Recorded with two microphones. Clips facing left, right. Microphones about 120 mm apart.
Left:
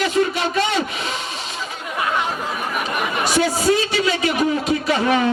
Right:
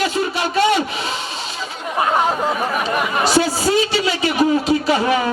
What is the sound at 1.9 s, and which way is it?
Chatter, 35° right (ahead or behind).